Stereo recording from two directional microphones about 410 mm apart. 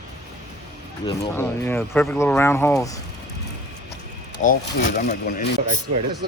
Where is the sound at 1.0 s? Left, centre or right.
Centre.